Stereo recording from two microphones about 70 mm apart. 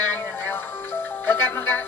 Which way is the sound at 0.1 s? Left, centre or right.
Left.